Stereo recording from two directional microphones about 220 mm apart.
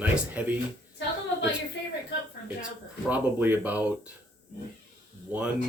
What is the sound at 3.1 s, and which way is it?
Speech, 10° right (ahead or behind).